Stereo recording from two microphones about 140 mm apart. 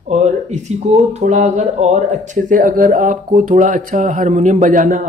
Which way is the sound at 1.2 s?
55° right (ahead or behind).